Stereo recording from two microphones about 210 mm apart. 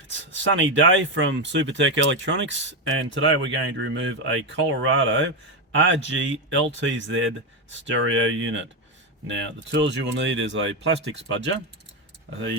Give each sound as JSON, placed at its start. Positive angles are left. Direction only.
{"t": 0.5, "sound": "speech", "side_deg": -65}